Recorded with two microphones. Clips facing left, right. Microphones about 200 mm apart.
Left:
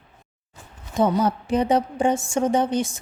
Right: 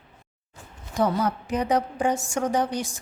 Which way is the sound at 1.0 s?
25° left (ahead or behind).